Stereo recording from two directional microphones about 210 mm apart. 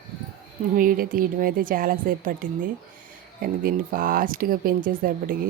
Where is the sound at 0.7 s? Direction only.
40° right (ahead or behind).